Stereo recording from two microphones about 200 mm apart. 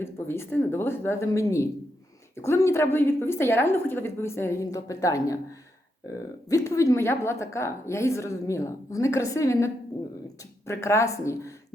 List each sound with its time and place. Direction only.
0.0 s a woman's voice: 10° left (ahead or behind)